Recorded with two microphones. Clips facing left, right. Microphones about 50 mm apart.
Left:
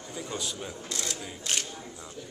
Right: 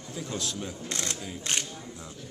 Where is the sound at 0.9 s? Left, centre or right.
Right.